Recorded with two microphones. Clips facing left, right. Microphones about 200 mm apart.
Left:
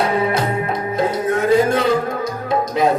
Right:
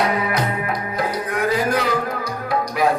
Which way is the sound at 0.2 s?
25° left (ahead or behind).